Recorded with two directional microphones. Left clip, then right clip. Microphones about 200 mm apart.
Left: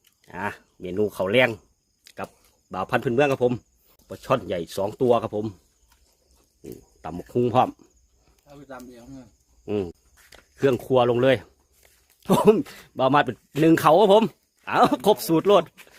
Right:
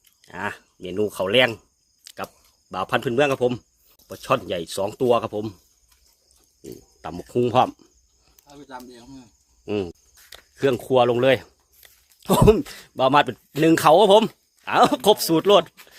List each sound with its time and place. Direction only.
0.2 s speech: centre (ahead or behind)
6.6 s speech: 10° right (ahead or behind)
8.5 s speech: 20° left (ahead or behind)
9.6 s speech: 10° right (ahead or behind)